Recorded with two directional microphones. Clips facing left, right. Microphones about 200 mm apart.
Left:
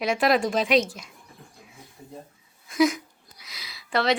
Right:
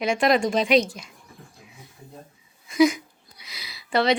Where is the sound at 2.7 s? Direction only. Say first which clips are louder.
Right 3 dB; centre (ahead or behind).